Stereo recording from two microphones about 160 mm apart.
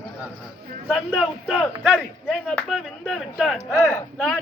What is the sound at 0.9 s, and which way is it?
A man's voice, 5° right (ahead or behind).